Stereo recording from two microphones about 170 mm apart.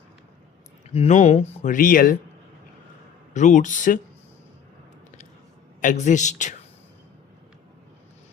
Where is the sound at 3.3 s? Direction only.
45° left (ahead or behind).